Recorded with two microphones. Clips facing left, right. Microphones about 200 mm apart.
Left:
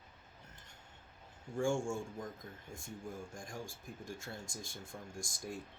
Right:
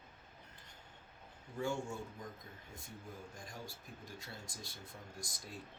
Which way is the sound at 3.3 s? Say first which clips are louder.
Left 4 dB; 45° left (ahead or behind).